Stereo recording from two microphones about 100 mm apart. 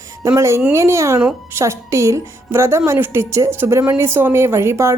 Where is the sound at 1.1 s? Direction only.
15° right (ahead or behind).